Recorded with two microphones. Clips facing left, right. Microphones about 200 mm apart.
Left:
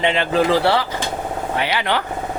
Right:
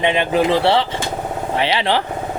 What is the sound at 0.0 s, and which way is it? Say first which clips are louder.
Speech: right 1 dB; 20° right (ahead or behind).